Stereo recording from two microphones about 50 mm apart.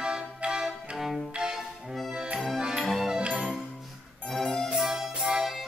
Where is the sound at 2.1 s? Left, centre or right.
Centre.